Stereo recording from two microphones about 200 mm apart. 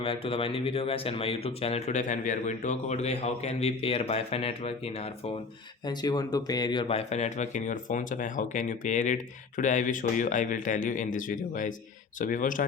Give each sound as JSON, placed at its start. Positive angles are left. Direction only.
{"t": 0.0, "sound": "speech", "side_deg": 25}
{"t": 5.8, "sound": "speech", "side_deg": 20}